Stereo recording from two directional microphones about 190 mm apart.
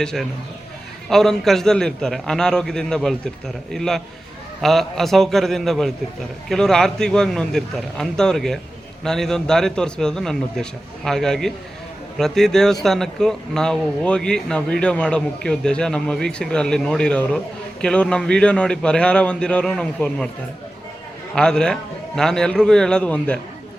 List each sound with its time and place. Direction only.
0.0 s a man's voice: 5° left (ahead or behind)
21.3 s a man's voice: 5° left (ahead or behind)